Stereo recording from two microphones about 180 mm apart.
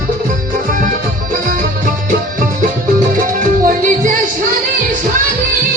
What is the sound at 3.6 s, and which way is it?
Music, 45° right (ahead or behind).